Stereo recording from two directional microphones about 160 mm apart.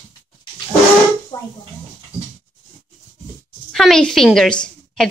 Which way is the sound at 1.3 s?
25° left (ahead or behind).